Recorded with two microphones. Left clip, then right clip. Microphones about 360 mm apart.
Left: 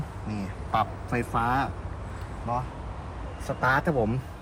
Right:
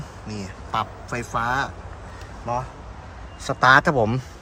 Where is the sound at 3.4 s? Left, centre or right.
Centre.